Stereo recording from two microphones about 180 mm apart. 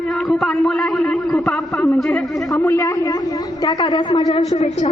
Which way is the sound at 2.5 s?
15° left (ahead or behind).